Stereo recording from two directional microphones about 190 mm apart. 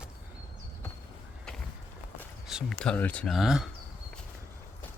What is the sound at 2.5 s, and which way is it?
Speech, centre (ahead or behind).